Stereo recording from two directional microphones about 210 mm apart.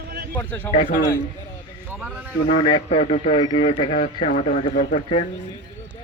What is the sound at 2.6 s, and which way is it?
A man's voice, 25° left (ahead or behind).